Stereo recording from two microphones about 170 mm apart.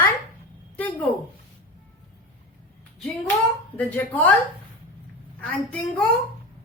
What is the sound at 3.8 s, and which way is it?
Speech, 10° left (ahead or behind).